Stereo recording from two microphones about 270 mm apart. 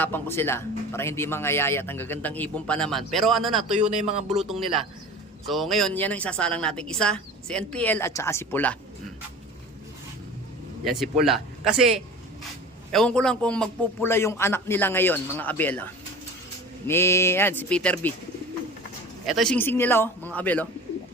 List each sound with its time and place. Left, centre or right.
0.0 s speech: centre
3.8 s speech: right
4.3 s a woman's voice: centre
10.8 s a woman's voice: centre
19.2 s speech: centre